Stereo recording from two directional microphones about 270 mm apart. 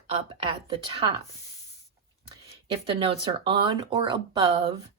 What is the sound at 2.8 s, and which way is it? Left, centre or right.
Speech, centre.